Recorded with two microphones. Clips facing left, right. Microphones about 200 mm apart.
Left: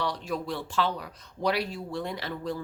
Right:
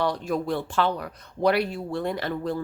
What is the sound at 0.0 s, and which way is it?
Speech, 50° right (ahead or behind).